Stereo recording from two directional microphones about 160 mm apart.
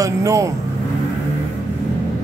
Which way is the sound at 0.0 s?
20° right (ahead or behind).